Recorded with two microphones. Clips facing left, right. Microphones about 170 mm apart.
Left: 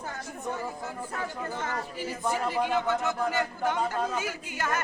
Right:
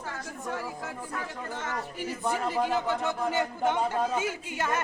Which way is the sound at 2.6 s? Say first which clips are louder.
Left 1 dB; 35° right (ahead or behind).